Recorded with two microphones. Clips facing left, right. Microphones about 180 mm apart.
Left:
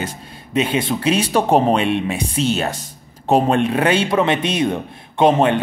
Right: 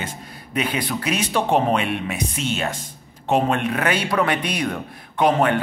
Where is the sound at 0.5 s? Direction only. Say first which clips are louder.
Left 5 dB; 25° left (ahead or behind).